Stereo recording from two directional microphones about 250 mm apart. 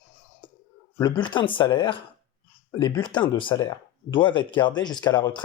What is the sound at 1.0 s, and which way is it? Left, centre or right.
Speech, centre.